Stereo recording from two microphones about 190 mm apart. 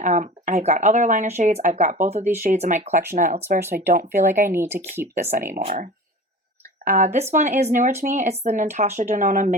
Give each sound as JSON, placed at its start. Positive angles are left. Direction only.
{"t": 0.0, "sound": "speech", "side_deg": -40}
{"t": 3.6, "sound": "speech", "side_deg": -10}
{"t": 3.9, "sound": "speech", "side_deg": -45}
{"t": 4.5, "sound": "speech", "side_deg": -10}
{"t": 5.3, "sound": "speech", "side_deg": -50}